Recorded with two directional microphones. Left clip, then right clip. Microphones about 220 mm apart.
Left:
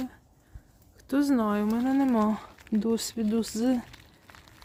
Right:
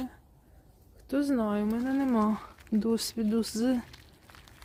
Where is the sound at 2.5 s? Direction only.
25° left (ahead or behind).